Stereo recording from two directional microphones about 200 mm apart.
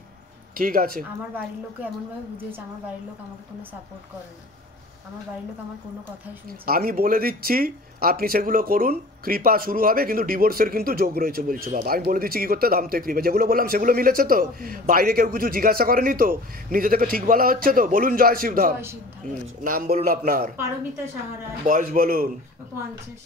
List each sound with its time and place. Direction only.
0.6 s speech: 45° right (ahead or behind)
6.6 s speech: 45° right (ahead or behind)
21.6 s speech: 45° right (ahead or behind)